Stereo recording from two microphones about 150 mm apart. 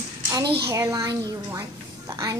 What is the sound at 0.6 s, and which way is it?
Child singing, 20° right (ahead or behind).